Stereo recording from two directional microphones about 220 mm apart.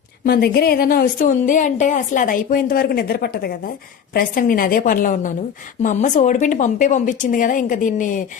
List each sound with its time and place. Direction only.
0.3 s a woman's voice: 45° left (ahead or behind)